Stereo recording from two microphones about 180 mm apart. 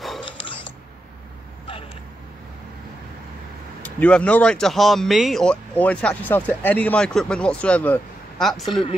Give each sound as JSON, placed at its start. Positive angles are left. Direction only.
{"t": 0.2, "sound": "mechanisms", "side_deg": 30}
{"t": 3.8, "sound": "speech", "side_deg": 10}